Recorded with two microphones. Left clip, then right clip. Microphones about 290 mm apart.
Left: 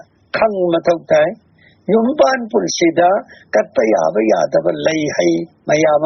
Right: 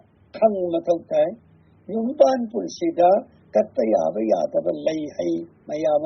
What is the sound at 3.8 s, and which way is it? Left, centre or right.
Speech, left.